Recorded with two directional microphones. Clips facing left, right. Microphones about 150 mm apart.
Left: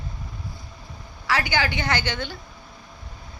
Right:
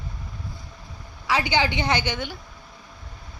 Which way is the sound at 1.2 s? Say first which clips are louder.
Right 1 dB; 20° right (ahead or behind).